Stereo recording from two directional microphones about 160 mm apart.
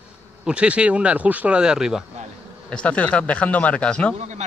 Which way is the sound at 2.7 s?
10° left (ahead or behind).